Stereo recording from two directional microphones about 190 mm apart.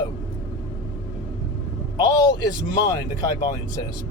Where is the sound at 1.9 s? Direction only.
20° left (ahead or behind).